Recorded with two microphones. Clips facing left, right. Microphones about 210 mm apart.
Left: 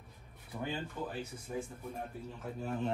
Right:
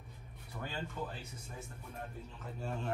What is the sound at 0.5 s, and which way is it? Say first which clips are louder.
Speech: left 5 dB; 20° left (ahead or behind).